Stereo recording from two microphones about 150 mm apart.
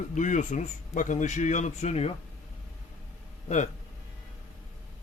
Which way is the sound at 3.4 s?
50° left (ahead or behind).